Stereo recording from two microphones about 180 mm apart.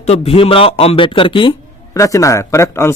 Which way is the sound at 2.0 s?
15° left (ahead or behind).